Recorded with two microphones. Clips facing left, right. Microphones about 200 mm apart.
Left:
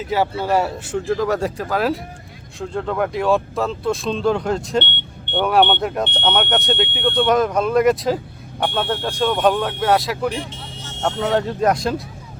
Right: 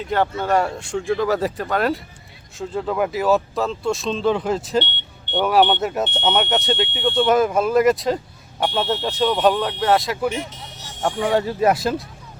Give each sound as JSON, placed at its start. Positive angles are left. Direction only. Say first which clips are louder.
{"t": 0.0, "sound": "speech", "louder": "left 1 dB", "side_deg": 5}
{"t": 4.8, "sound": "vehicle", "louder": "even", "side_deg": 60}
{"t": 5.4, "sound": "speech", "louder": "even", "side_deg": -5}
{"t": 6.8, "sound": "speech", "louder": "left 1 dB", "side_deg": 55}
{"t": 7.3, "sound": "speech", "louder": "right 1 dB", "side_deg": -5}
{"t": 10.5, "sound": "vehicle", "louder": "left 3 dB", "side_deg": 30}
{"t": 11.2, "sound": "speech", "louder": "even", "side_deg": -5}